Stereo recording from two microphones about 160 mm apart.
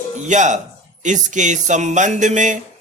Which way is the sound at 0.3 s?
50° right (ahead or behind).